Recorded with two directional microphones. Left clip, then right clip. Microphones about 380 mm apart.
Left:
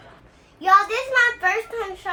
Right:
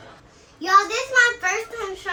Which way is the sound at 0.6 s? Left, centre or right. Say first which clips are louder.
Left 1 dB; centre.